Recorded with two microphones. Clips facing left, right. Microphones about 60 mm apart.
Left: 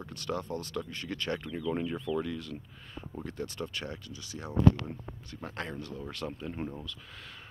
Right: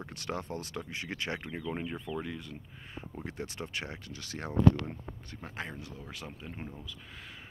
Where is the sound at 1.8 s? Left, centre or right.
Centre.